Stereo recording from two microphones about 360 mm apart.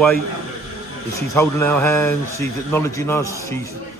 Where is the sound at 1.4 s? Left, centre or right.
Centre.